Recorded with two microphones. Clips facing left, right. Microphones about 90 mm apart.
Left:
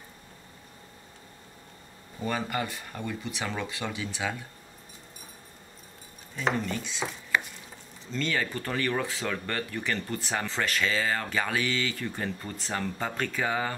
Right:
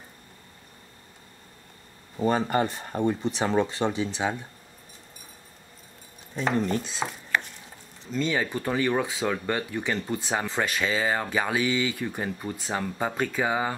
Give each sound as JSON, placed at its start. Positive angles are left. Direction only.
{"t": 2.1, "sound": "speech", "side_deg": -35}
{"t": 6.6, "sound": "speech", "side_deg": -40}
{"t": 8.1, "sound": "speech", "side_deg": -15}